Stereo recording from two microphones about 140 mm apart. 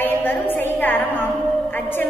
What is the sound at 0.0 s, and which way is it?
A woman's voice, 15° left (ahead or behind).